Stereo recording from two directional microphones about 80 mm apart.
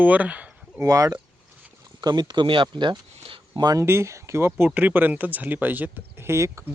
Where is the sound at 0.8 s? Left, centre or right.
Right.